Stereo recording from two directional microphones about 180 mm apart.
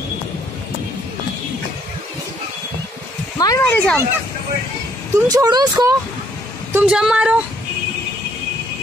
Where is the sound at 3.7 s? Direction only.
10° left (ahead or behind).